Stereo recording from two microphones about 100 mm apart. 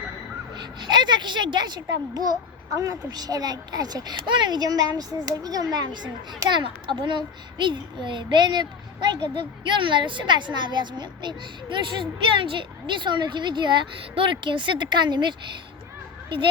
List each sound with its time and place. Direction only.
0.5 s a child's voice: 50° right (ahead or behind)